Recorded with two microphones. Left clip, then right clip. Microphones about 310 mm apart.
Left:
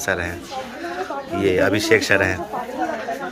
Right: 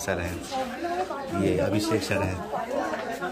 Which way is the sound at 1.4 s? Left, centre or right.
Centre.